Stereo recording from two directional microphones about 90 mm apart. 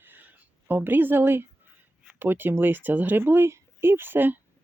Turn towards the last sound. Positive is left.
turn(degrees=-25)  # may be behind; listen again after turning